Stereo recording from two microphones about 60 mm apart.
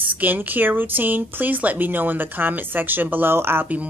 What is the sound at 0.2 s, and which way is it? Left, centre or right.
Speech, right.